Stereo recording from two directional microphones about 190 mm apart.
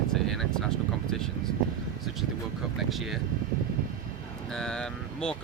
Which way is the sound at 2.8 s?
Centre (ahead or behind).